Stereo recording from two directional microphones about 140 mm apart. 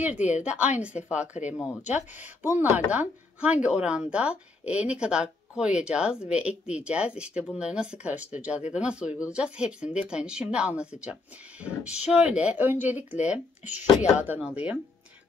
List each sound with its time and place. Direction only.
0.0 s speech: 10° right (ahead or behind)
1.3 s speech: 45° left (ahead or behind)
1.9 s speech: 15° right (ahead or behind)